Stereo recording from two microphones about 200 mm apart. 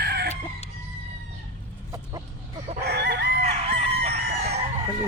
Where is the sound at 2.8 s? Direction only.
55° right (ahead or behind).